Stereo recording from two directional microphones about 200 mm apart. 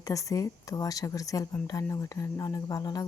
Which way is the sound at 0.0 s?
15° left (ahead or behind).